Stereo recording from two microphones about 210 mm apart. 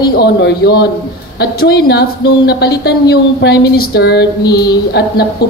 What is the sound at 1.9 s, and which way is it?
A woman's voice, 50° left (ahead or behind).